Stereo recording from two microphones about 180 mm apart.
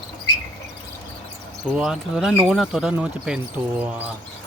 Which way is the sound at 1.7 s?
5° right (ahead or behind).